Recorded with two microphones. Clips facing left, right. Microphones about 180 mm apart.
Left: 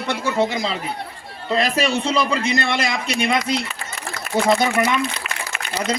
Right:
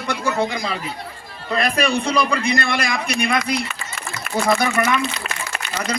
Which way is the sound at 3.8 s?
60° left (ahead or behind).